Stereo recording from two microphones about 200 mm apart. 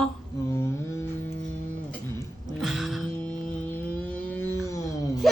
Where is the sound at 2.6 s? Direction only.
Centre (ahead or behind).